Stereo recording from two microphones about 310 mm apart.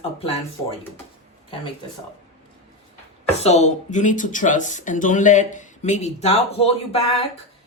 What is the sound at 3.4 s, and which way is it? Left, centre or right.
Speech, left.